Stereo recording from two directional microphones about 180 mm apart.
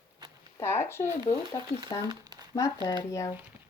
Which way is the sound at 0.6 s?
15° left (ahead or behind).